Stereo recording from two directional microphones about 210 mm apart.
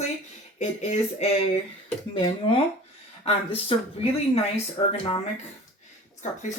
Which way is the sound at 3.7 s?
25° left (ahead or behind).